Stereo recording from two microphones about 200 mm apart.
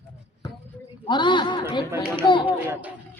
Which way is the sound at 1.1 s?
25° left (ahead or behind).